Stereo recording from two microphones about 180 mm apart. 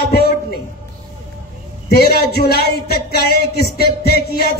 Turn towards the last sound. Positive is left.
turn(degrees=60)  # may be behind; listen again after turning